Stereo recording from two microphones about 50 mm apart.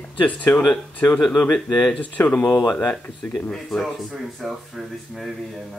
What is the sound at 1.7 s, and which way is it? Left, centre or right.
Speech, left.